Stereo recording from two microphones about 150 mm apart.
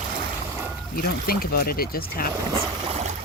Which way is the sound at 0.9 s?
90° left.